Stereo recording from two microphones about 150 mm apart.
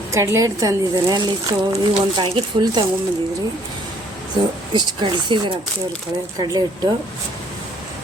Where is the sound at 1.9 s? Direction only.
35° right (ahead or behind).